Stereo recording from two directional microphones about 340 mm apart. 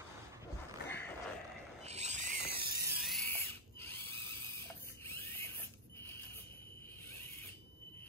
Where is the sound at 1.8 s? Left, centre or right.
Centre.